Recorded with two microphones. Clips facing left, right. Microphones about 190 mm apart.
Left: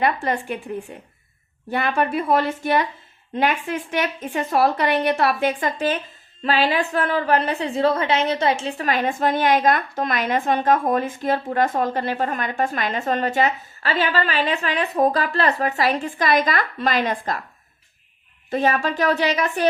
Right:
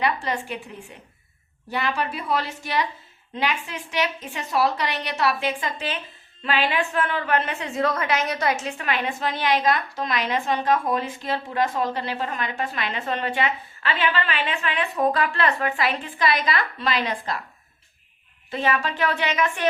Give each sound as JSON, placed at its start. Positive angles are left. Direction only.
{"t": 0.0, "sound": "a woman's voice", "side_deg": 50}
{"t": 6.4, "sound": "a woman's voice", "side_deg": 35}
{"t": 18.5, "sound": "a woman's voice", "side_deg": 45}